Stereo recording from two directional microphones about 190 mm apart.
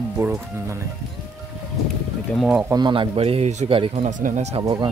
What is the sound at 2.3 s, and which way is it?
Speech, 5° right (ahead or behind).